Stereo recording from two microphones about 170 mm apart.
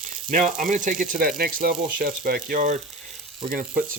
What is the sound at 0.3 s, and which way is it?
Speech, 50° right (ahead or behind).